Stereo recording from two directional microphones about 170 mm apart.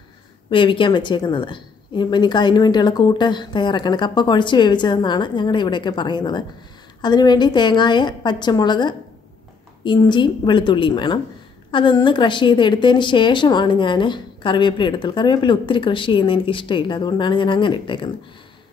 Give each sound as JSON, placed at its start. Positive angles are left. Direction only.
{"t": 0.5, "sound": "a woman's voice", "side_deg": 30}